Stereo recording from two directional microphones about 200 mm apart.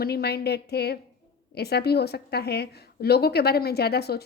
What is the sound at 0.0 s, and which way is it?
A woman's voice, 55° left (ahead or behind).